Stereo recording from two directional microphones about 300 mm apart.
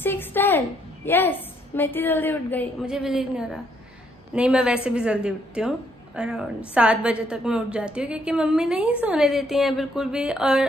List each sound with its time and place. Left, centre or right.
0.0 s a woman's voice: centre